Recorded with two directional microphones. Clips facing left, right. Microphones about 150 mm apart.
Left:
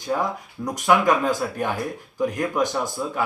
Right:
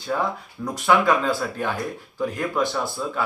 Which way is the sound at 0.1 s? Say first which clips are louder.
Left 1 dB; 20° left (ahead or behind).